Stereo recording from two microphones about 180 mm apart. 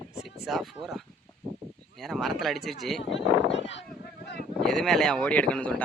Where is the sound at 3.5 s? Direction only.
90° left.